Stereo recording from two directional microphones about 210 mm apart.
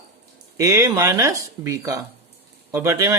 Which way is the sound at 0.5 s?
15° right (ahead or behind).